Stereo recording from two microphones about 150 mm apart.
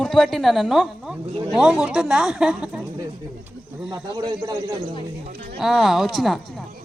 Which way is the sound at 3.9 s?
20° right (ahead or behind).